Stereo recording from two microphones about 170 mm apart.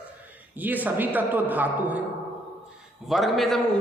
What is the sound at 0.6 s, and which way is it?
A man's voice, 10° right (ahead or behind).